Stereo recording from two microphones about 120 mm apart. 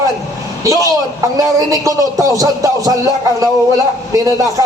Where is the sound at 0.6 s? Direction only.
30° right (ahead or behind).